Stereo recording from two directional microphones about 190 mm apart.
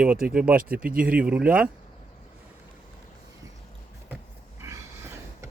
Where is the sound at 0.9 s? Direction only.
50° right (ahead or behind).